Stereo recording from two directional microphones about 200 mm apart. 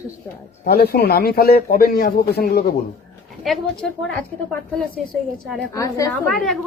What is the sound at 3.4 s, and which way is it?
Speech, 5° left (ahead or behind).